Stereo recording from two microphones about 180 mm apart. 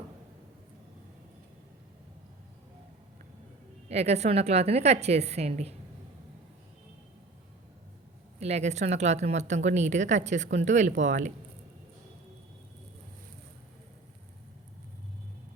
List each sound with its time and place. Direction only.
3.8 s a woman's voice: 35° right (ahead or behind)
8.4 s a woman's voice: 35° right (ahead or behind)